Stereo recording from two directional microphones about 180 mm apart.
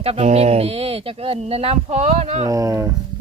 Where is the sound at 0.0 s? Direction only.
35° right (ahead or behind).